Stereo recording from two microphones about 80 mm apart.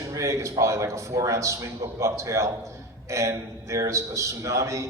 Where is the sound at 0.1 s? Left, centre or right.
Right.